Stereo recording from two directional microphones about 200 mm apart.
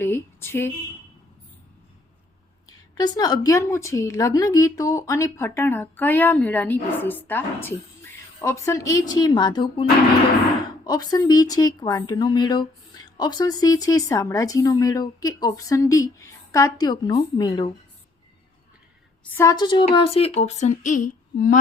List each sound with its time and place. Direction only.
0.0 s speech: 10° left (ahead or behind)
2.6 s a woman's voice: 20° left (ahead or behind)
10.8 s a woman's voice: 20° left (ahead or behind)
19.4 s speech: 20° left (ahead or behind); by 21.6 s 45° left (ahead or behind)